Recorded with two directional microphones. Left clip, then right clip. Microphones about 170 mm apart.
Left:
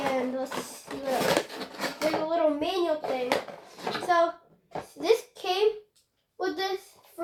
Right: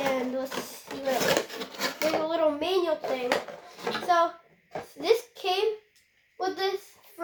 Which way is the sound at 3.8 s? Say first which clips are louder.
Even; 15° left (ahead or behind).